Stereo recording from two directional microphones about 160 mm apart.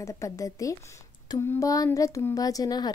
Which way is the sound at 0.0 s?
20° left (ahead or behind).